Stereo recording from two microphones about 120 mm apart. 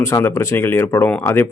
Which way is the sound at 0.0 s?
25° left (ahead or behind).